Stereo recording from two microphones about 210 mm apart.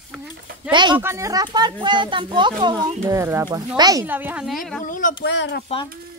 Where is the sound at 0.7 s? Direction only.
20° right (ahead or behind); by 4.8 s centre (ahead or behind).